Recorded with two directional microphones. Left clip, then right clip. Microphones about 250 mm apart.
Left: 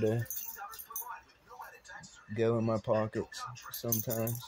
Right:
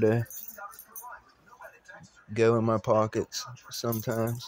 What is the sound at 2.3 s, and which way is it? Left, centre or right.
Speech, centre.